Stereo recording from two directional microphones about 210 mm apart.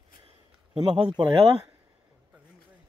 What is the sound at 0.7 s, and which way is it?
Speech, 20° right (ahead or behind).